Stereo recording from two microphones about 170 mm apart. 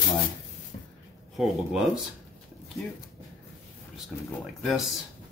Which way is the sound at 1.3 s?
5° right (ahead or behind).